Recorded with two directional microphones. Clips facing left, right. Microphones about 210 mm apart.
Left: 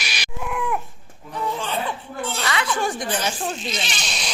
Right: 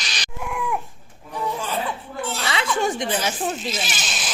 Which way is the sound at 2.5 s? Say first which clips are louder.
Right 2 dB; 25° right (ahead or behind).